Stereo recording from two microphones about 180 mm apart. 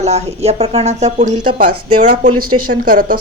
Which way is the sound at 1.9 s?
50° right (ahead or behind).